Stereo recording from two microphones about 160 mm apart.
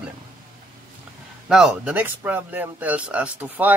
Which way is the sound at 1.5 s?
5° right (ahead or behind).